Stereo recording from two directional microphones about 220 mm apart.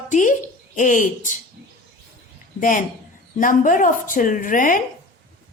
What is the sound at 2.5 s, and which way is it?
A woman's voice, 35° left (ahead or behind).